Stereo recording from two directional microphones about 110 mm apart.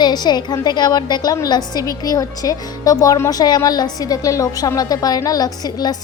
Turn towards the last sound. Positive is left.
turn(degrees=35)  # may be behind; listen again after turning